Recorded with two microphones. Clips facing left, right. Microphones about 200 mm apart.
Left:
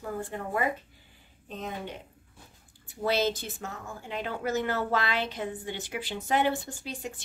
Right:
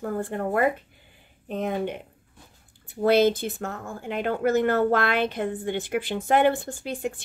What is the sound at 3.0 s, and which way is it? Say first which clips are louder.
Speech: right 8 dB; 55° right (ahead or behind).